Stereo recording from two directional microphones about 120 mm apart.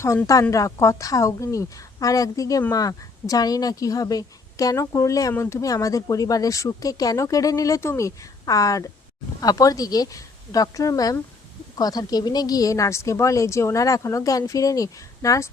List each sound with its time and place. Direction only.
0.5 s a woman's voice: 25° left (ahead or behind)